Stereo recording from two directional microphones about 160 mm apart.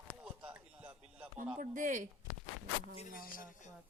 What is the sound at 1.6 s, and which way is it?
Speech, 50° right (ahead or behind).